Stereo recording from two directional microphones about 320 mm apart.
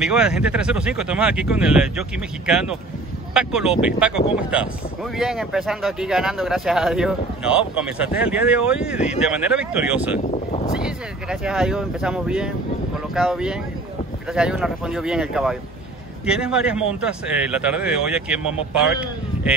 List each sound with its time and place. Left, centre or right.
0.0 s speech: centre
10.3 s a sound: left
10.8 s speech: centre